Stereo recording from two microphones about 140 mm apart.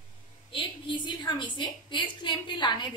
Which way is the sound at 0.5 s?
35° left (ahead or behind).